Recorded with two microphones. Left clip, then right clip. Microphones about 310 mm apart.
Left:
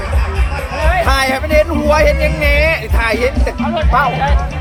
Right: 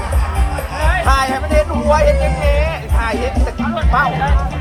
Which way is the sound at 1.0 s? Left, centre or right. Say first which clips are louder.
Left 1 dB; left.